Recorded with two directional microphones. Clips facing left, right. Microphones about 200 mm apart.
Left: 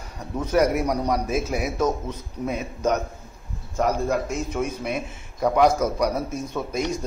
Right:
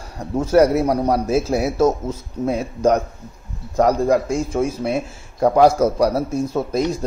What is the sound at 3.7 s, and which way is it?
A man's voice, 35° right (ahead or behind).